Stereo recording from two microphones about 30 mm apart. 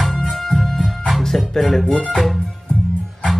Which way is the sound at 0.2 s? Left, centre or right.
Centre.